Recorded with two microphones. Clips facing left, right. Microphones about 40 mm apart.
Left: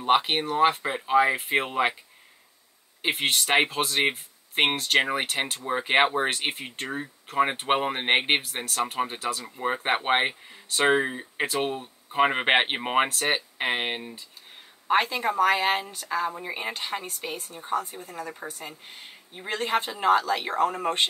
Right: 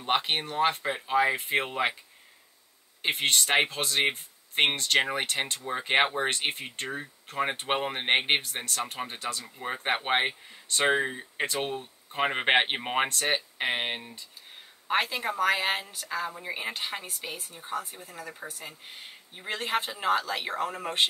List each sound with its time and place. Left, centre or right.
0.0 s speech: centre
3.0 s a woman's voice: centre